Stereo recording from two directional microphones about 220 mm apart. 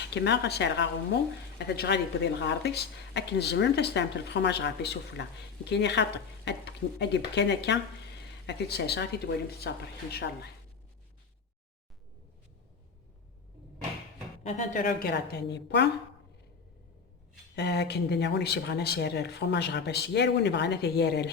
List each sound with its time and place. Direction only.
0.0 s speech: 50° left (ahead or behind)
14.4 s speech: 35° left (ahead or behind); by 15.9 s 50° left (ahead or behind)
17.5 s speech: 50° left (ahead or behind)